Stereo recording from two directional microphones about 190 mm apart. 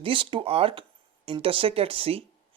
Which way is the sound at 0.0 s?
25° right (ahead or behind).